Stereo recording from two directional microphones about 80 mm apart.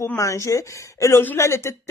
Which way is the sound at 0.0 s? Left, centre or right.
Left.